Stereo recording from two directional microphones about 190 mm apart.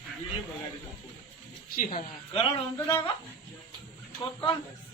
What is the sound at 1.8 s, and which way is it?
Speech, 45° left (ahead or behind).